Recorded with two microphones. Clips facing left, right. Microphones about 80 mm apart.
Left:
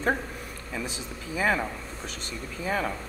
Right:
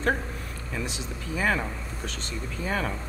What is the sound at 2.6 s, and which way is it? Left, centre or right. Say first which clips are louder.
Speech: left 1 dB; centre.